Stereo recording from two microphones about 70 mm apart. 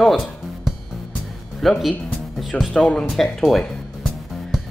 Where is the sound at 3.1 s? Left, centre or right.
Centre.